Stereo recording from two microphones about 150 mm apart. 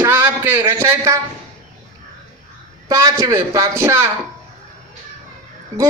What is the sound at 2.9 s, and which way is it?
A man's voice, 20° right (ahead or behind).